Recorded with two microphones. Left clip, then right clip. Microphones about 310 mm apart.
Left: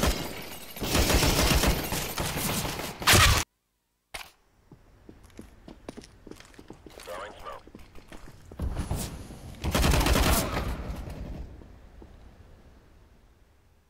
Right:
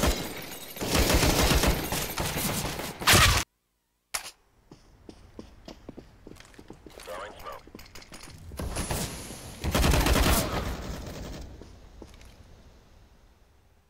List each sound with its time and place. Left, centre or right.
0.0 s fusillade: centre
5.1 s a sound: right
5.7 s clip-clop: centre
6.3 s clip-clop: centre
7.7 s dog: right
8.5 s creak: right
9.6 s gunshot: centre